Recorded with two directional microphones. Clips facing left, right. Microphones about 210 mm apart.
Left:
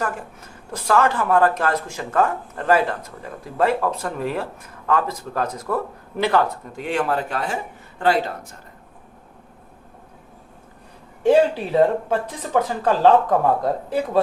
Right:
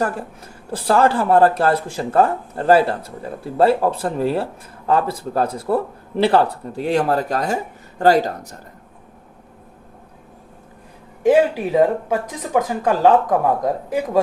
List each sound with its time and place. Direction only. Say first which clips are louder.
0.7 s speech: right 3 dB; 35° right (ahead or behind)
11.2 s speech: right 1 dB; 10° right (ahead or behind)